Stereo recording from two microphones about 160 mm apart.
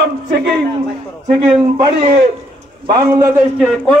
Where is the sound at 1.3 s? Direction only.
35° right (ahead or behind).